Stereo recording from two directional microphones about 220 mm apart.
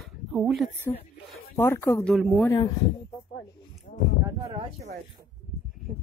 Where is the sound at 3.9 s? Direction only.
35° left (ahead or behind).